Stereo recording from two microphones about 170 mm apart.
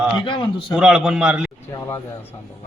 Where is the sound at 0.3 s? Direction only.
25° left (ahead or behind).